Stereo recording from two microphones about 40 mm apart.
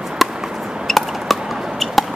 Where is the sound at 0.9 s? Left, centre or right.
Centre.